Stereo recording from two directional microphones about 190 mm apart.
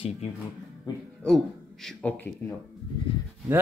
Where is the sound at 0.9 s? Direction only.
20° left (ahead or behind).